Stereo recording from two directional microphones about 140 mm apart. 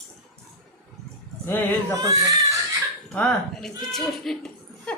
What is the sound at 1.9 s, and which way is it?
Speech, 25° right (ahead or behind).